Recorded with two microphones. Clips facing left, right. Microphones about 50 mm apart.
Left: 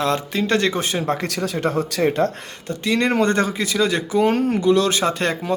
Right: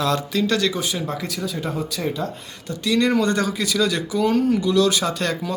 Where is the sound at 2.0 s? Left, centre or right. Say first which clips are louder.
Left 7 dB; left.